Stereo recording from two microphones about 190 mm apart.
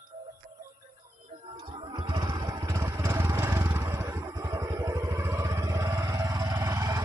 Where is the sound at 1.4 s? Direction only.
25° right (ahead or behind).